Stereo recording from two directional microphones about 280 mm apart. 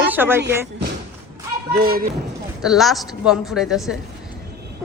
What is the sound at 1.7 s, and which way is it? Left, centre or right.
Speech, right.